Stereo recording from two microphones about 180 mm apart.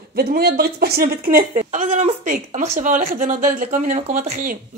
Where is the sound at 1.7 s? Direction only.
40° right (ahead or behind).